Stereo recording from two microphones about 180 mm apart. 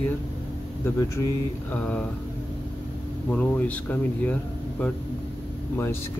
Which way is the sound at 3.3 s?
10° left (ahead or behind).